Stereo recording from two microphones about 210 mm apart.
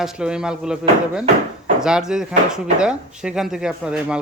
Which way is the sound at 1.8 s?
5° right (ahead or behind).